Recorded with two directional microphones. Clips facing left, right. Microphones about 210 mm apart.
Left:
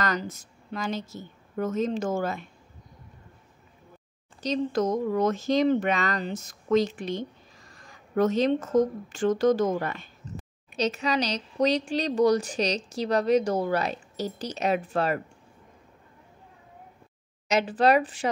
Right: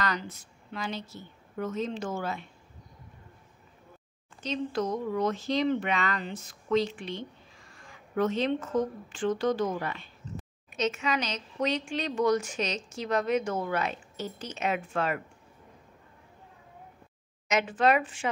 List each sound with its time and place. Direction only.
0.0 s a woman's voice: 45° left (ahead or behind)
4.4 s speech: 40° left (ahead or behind)
10.7 s speech: 35° left (ahead or behind)
17.5 s speech: 35° left (ahead or behind)